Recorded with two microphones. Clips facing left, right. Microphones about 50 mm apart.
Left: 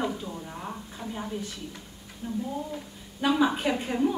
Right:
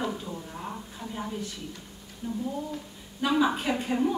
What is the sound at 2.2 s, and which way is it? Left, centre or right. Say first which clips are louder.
Speech: even; left.